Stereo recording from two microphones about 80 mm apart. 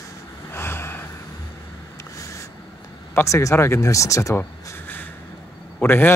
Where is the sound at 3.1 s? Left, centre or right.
Left.